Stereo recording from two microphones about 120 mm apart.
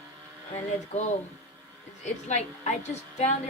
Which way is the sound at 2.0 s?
70° left (ahead or behind).